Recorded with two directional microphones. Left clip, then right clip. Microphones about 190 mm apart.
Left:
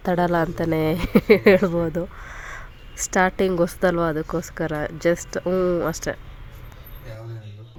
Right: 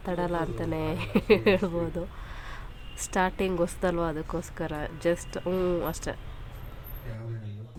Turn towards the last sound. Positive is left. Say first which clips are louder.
# left 7 dB
turn(degrees=25)  # may be behind; listen again after turning